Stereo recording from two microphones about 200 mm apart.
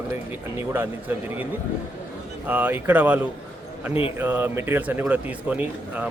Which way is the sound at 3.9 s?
25° left (ahead or behind).